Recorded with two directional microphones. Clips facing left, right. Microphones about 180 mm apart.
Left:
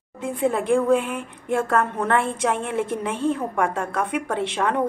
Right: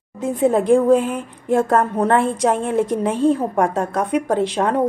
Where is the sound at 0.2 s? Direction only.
40° right (ahead or behind).